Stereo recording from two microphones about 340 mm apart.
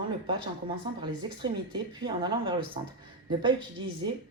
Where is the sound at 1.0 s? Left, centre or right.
Centre.